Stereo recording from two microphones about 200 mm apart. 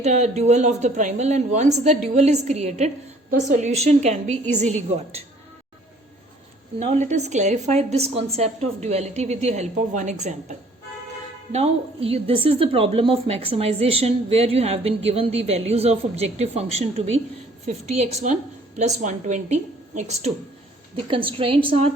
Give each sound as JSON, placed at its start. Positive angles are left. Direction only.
{"t": 0.0, "sound": "a woman's voice", "side_deg": -35}
{"t": 6.7, "sound": "a woman's voice", "side_deg": -35}
{"t": 11.5, "sound": "a woman's voice", "side_deg": -30}